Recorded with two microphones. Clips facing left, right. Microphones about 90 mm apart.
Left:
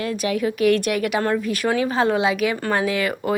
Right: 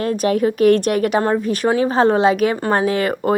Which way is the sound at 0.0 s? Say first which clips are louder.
Right 5 dB; 40° right (ahead or behind).